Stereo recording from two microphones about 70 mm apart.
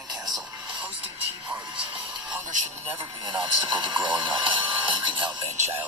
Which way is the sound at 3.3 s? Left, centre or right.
Right.